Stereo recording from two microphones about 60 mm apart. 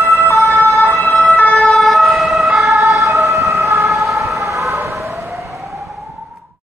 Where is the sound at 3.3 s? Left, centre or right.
Right.